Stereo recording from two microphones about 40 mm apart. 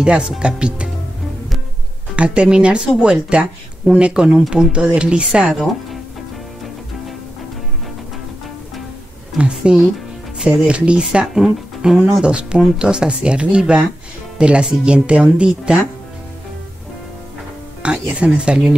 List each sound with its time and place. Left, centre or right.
0.0 s speech: right
2.1 s speech: right
5.4 s speech: centre
9.5 s speech: right
18.1 s speech: right